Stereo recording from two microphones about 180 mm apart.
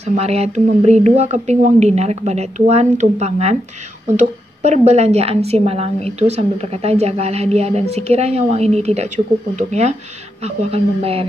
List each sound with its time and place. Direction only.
0.1 s a woman's voice: 35° right (ahead or behind)